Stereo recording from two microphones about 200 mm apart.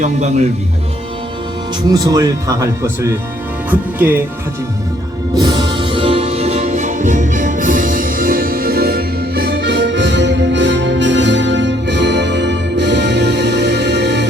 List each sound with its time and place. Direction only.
0.0 s a man's voice: 35° right (ahead or behind)
1.9 s speech: 20° right (ahead or behind)
5.3 s music: 20° right (ahead or behind); by 14.3 s 60° right (ahead or behind)